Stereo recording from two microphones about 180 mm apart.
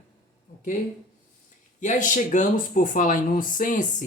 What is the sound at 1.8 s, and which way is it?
Speech, 45° left (ahead or behind).